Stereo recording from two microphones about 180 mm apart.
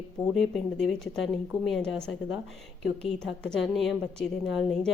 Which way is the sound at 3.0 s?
5° left (ahead or behind).